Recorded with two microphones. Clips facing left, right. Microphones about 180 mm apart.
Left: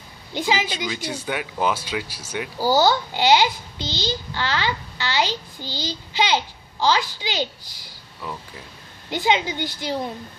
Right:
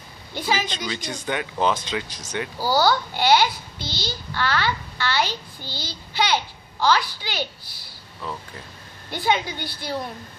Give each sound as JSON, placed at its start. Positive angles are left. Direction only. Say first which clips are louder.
{"t": 0.3, "sound": "a child's voice", "louder": "left 2 dB", "side_deg": 15}
{"t": 7.8, "sound": "a sound", "louder": "right 1 dB", "side_deg": 10}
{"t": 9.1, "sound": "a child's voice", "louder": "left 2 dB", "side_deg": 20}